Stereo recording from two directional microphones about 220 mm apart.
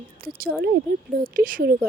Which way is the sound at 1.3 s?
40° right (ahead or behind).